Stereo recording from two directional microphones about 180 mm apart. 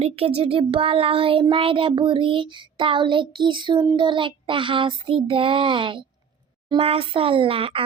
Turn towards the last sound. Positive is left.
turn(degrees=-30)  # may be behind; listen again after turning